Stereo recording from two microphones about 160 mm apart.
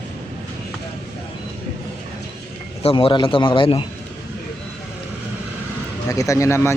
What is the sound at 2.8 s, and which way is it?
A man's voice, 35° left (ahead or behind).